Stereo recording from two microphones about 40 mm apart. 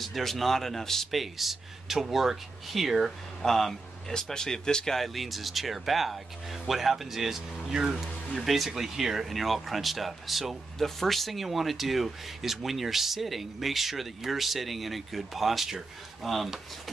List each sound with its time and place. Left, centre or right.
0.0 s speech: centre
1.2 s speech: centre
3.4 s speech: centre
4.9 s speech: centre
8.5 s speech: centre